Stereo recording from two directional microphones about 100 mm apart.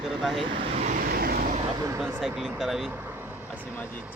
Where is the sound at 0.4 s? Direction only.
60° right (ahead or behind).